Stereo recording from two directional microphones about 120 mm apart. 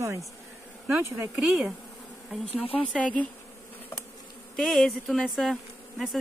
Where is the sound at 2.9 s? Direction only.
10° left (ahead or behind).